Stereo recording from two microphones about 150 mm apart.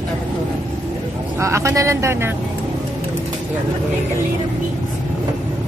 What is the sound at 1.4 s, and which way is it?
Speech, 20° right (ahead or behind).